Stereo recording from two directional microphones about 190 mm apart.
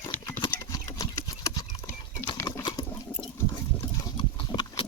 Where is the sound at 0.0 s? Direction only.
15° left (ahead or behind).